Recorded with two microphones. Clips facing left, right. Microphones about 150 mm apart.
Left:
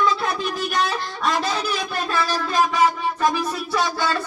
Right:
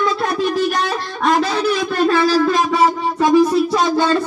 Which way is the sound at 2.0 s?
90° right.